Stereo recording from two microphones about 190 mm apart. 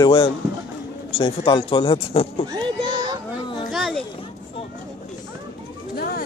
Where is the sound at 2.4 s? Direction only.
20° right (ahead or behind).